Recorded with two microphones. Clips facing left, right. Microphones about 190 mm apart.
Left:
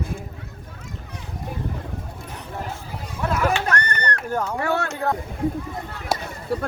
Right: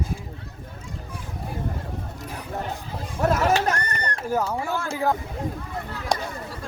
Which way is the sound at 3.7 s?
70° left (ahead or behind).